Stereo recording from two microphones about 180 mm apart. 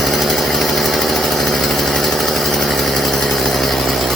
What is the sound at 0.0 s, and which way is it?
Engine, centre (ahead or behind).